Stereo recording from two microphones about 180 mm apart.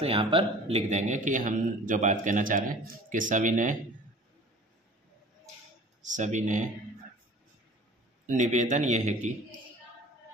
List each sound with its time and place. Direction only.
0.0 s a man's voice: 30° right (ahead or behind)
6.0 s a man's voice: 45° right (ahead or behind)
8.3 s a man's voice: 40° right (ahead or behind)